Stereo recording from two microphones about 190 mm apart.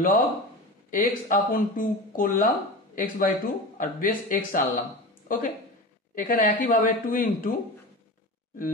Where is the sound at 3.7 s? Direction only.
45° left (ahead or behind).